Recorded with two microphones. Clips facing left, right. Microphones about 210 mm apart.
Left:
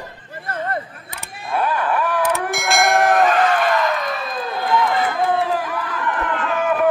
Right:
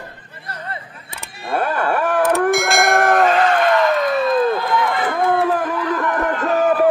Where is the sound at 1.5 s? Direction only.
50° right (ahead or behind).